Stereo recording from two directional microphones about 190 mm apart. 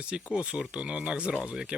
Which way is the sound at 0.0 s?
5° right (ahead or behind).